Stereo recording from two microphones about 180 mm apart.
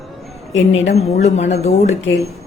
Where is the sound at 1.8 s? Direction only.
90° left.